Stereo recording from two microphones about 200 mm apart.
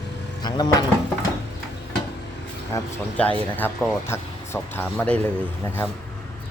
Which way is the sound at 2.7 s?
5° left (ahead or behind).